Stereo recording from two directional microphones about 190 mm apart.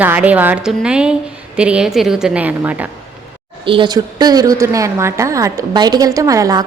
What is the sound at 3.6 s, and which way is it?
A woman's voice, 25° right (ahead or behind).